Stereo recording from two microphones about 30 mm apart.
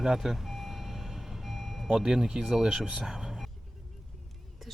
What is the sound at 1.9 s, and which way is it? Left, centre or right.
Speech, centre.